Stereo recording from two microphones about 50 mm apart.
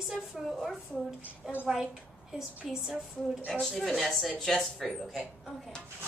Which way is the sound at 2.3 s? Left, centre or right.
Centre.